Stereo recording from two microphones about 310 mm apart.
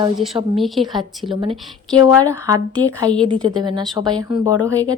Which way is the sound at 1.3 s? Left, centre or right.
Centre.